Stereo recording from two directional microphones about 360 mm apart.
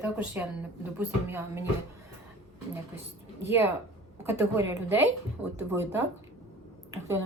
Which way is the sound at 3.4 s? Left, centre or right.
Centre.